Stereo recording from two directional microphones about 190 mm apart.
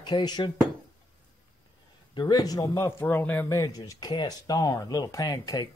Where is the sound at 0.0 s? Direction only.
20° left (ahead or behind).